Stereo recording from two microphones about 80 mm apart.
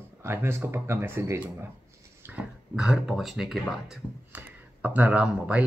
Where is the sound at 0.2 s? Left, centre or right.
Right.